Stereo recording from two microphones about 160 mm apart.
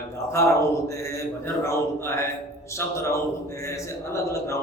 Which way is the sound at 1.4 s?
15° left (ahead or behind).